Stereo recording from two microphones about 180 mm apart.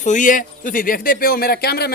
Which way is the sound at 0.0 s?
45° left (ahead or behind).